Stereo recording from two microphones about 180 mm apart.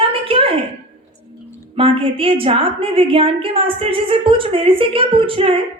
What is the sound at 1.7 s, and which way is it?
A woman's voice, 30° right (ahead or behind).